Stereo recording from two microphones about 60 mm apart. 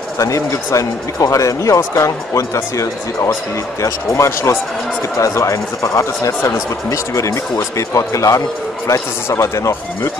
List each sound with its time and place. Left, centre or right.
0.2 s speech: left